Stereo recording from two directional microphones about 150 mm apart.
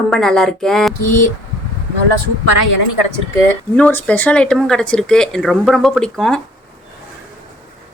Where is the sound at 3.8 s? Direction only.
10° left (ahead or behind).